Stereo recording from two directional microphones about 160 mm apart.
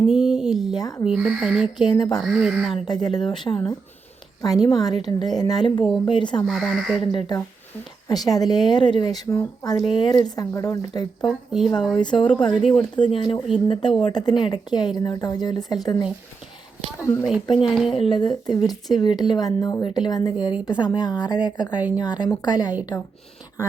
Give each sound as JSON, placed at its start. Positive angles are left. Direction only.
{"t": 0.1, "sound": "a sound", "side_deg": -5}
{"t": 0.7, "sound": "speech", "side_deg": 25}
{"t": 1.0, "sound": "speech", "side_deg": -5}
{"t": 1.8, "sound": "speech", "side_deg": 25}
{"t": 2.1, "sound": "speech", "side_deg": 0}
{"t": 2.7, "sound": "speech", "side_deg": 25}
{"t": 6.4, "sound": "speech", "side_deg": 0}
{"t": 7.0, "sound": "speech", "side_deg": 30}
{"t": 11.3, "sound": "speech", "side_deg": 0}
{"t": 11.9, "sound": "speech", "side_deg": 30}
{"t": 17.4, "sound": "speech", "side_deg": 30}
{"t": 17.7, "sound": "speech", "side_deg": 0}
{"t": 17.9, "sound": "speech", "side_deg": 30}